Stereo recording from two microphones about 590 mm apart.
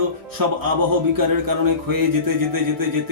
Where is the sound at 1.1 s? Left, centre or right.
Right.